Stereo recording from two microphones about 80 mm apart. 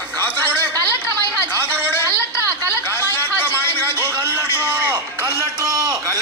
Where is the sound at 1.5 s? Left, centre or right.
Left.